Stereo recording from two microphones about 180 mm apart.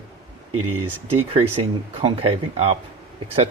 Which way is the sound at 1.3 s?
30° right (ahead or behind).